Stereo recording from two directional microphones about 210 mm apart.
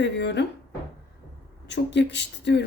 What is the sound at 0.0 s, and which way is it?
Speech, 55° left (ahead or behind).